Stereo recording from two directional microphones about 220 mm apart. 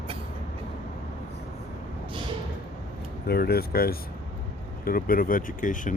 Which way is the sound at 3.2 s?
45° left (ahead or behind).